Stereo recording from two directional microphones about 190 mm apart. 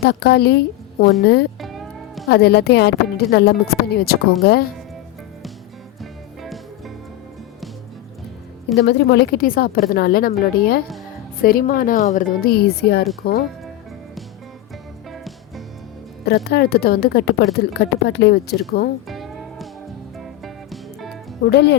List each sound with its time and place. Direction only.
0.0 s a woman's voice: 60° left (ahead or behind)
1.6 s music: centre (ahead or behind)
2.3 s a woman's voice: 60° left (ahead or behind)
6.0 s music: centre (ahead or behind)
8.7 s a woman's voice: 65° left (ahead or behind)
15.1 s music: centre (ahead or behind)
16.2 s a woman's voice: 55° left (ahead or behind)
19.0 s music: centre (ahead or behind)
21.4 s a woman's voice: 65° left (ahead or behind)